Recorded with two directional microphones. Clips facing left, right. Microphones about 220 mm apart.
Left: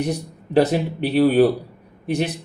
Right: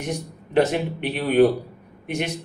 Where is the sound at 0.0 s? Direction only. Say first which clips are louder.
Left 5 dB; 35° left (ahead or behind).